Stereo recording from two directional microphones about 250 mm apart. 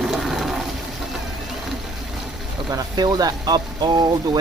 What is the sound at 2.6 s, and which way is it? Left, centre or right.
Speech, centre.